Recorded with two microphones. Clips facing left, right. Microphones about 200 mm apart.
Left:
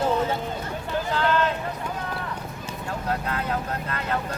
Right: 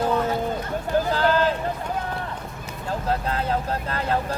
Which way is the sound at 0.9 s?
35° right (ahead or behind).